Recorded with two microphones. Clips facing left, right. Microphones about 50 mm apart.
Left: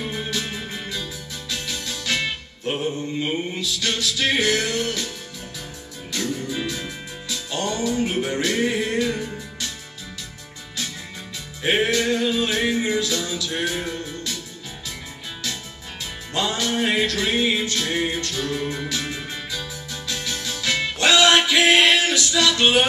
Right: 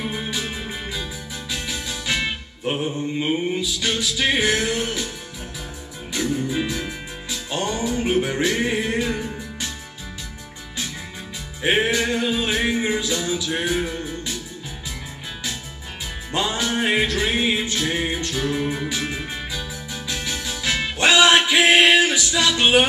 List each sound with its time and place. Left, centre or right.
0.0 s music: centre
6.1 s music: centre
11.6 s music: centre
16.3 s music: centre